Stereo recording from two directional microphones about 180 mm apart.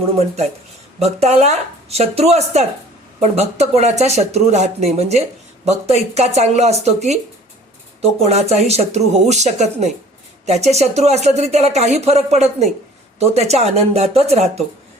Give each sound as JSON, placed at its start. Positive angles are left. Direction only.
{"t": 0.9, "sound": "speech", "side_deg": -35}